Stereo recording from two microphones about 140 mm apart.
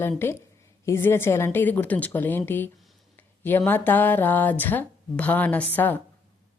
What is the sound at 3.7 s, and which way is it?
A woman's voice, 15° left (ahead or behind).